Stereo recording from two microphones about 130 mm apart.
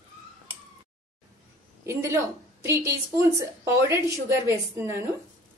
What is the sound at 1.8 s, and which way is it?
A woman's voice, 20° right (ahead or behind).